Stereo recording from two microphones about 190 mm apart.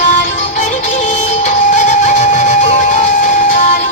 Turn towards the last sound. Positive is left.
turn(degrees=45)  # may be behind; listen again after turning